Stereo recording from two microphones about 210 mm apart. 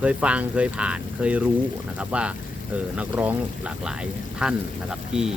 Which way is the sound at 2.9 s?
10° right (ahead or behind).